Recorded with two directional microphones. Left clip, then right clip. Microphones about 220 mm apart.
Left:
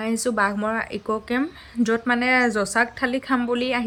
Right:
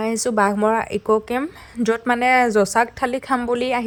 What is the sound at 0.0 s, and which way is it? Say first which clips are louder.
Speech: right 3 dB; 35° right (ahead or behind).